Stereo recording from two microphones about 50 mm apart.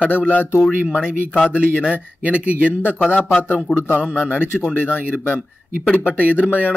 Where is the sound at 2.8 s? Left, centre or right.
Left.